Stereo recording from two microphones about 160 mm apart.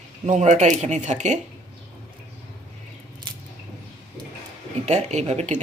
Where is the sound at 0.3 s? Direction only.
50° right (ahead or behind).